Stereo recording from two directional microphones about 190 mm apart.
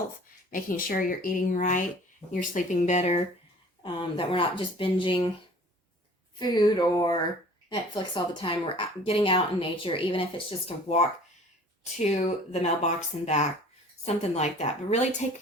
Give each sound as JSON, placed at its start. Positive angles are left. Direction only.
{"t": 0.5, "sound": "a woman's voice", "side_deg": 45}
{"t": 6.4, "sound": "a woman's voice", "side_deg": 20}
{"t": 11.8, "sound": "speech", "side_deg": 35}